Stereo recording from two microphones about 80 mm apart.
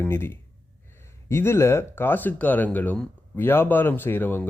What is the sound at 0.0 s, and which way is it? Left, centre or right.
Speech, left.